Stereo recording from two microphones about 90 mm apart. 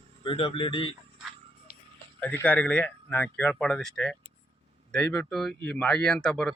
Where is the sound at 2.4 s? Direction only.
15° left (ahead or behind).